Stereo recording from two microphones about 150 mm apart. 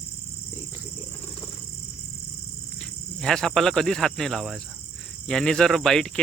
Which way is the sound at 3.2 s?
5° left (ahead or behind).